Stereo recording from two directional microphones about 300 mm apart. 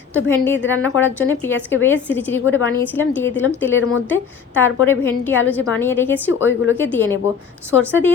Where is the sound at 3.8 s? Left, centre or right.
Left.